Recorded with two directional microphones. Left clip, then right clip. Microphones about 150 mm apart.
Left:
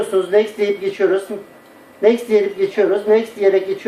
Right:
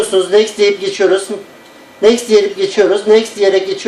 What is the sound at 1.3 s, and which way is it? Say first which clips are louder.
Speech: right 5 dB; 90° right.